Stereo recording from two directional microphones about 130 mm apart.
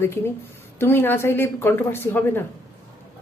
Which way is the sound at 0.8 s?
15° left (ahead or behind).